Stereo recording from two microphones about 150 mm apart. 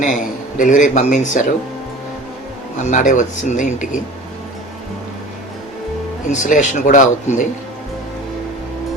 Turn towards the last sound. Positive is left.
turn(degrees=55)  # may be behind; listen again after turning